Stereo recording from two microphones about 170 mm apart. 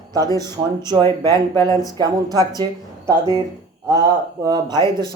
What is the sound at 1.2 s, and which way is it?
Speech, 25° right (ahead or behind).